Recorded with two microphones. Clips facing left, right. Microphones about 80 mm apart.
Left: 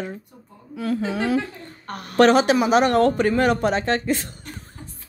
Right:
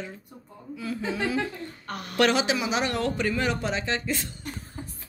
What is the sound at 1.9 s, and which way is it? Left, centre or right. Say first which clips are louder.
Speech: left 8 dB; left.